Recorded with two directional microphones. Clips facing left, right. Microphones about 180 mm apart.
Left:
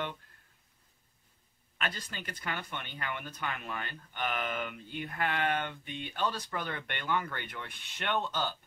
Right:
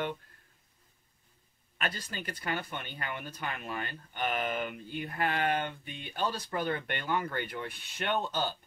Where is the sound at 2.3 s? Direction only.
40° right (ahead or behind).